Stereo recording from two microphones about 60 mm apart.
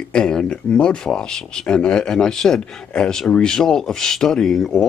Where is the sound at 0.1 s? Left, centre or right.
Centre.